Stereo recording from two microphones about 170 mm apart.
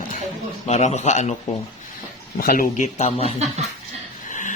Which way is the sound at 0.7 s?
45° left (ahead or behind).